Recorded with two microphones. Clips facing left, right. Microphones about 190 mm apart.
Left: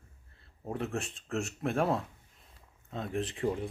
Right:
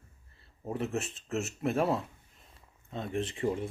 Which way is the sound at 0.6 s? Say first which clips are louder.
Right 2 dB; centre (ahead or behind).